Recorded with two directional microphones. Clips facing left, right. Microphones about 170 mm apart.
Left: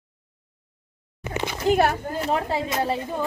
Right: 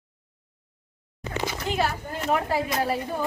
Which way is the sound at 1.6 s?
55° left (ahead or behind).